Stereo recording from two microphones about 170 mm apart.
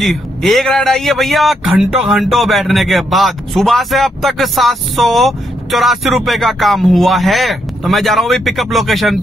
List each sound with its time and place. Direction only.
0.0 s a man's voice: centre (ahead or behind)